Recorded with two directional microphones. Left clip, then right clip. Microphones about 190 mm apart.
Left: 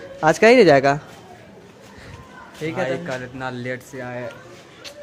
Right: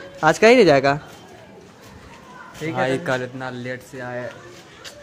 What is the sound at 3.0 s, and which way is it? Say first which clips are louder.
Speech: right 5 dB; 60° right (ahead or behind).